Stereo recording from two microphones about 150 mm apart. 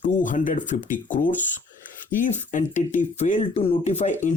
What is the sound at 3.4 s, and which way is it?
Speech, 40° left (ahead or behind).